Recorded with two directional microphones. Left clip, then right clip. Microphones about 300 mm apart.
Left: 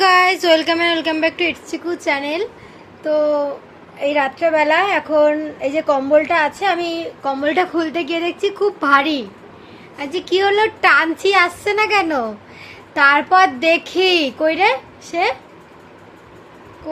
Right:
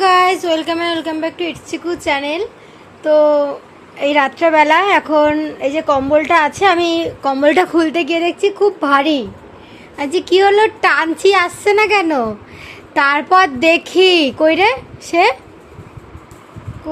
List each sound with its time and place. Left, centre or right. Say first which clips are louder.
0.0 s a woman's voice: right 1 dB; centre
10.0 s a woman's voice: right 5 dB; right
16.9 s a sound: right 2 dB; centre